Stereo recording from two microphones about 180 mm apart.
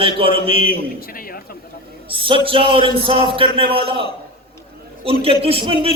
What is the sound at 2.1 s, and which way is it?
A man's voice, 30° right (ahead or behind).